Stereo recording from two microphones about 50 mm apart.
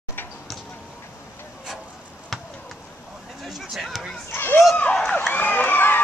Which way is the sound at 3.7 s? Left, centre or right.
Centre.